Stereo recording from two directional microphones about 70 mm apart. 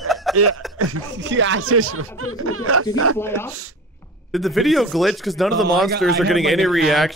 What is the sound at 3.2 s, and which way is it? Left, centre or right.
Speech, left.